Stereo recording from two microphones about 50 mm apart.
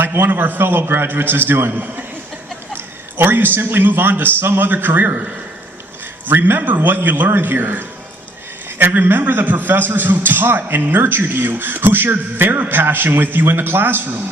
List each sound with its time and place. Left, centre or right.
0.0 s a man's voice: right
6.2 s a man's voice: right